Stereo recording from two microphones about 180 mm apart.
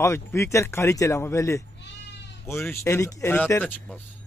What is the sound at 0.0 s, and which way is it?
Speech, 15° left (ahead or behind).